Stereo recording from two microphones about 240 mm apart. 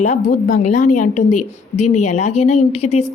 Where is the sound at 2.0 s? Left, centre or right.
Left.